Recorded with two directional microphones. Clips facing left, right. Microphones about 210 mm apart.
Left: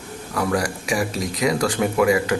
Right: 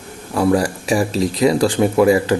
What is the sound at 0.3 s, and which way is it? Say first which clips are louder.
Speech: right 7 dB; 30° right (ahead or behind).